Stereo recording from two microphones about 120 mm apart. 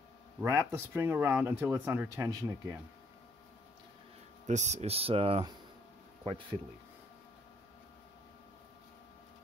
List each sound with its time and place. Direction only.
0.4 s speech: 25° right (ahead or behind)
4.5 s speech: 75° right (ahead or behind); by 5.4 s 55° right (ahead or behind)